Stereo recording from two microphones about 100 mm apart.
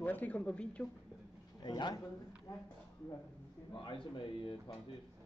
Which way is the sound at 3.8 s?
55° left (ahead or behind).